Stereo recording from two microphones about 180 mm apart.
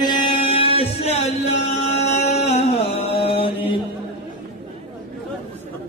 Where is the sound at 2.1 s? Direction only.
35° left (ahead or behind).